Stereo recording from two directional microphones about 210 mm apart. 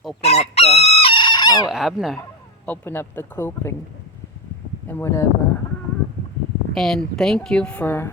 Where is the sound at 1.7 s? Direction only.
Centre (ahead or behind).